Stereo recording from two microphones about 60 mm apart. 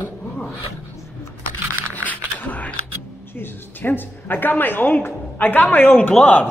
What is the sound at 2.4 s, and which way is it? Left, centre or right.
A woman's voice, left.